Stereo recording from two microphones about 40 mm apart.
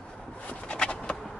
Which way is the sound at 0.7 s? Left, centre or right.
Left.